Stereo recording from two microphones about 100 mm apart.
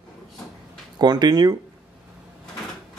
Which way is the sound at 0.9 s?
45° right (ahead or behind).